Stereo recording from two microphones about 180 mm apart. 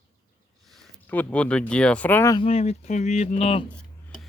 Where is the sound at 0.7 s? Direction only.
5° left (ahead or behind).